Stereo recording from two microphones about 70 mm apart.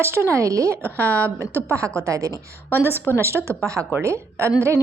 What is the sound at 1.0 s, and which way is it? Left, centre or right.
Speech, left.